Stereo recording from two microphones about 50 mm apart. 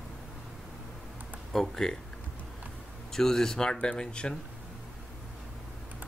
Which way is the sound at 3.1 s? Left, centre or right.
Centre.